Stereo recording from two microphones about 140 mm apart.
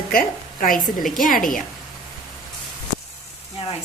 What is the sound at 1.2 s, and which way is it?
Speech, 75° left (ahead or behind).